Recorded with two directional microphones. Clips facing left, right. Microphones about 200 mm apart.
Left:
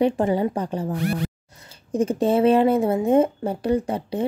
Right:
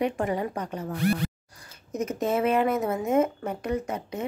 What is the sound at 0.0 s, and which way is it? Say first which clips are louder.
Speech: left 7 dB; 30° left (ahead or behind).